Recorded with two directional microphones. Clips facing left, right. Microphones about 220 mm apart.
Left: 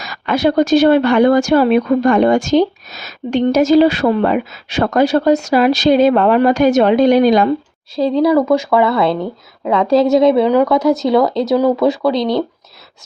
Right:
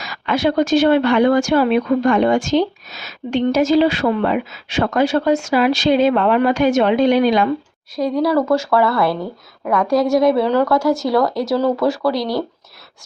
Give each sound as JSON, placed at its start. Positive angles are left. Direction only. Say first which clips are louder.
{"t": 0.0, "sound": "speech", "louder": "left 3 dB", "side_deg": 40}
{"t": 7.9, "sound": "speech", "louder": "left 4 dB", "side_deg": 25}